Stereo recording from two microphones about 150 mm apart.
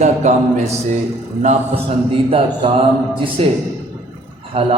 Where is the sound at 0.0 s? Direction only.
50° right (ahead or behind).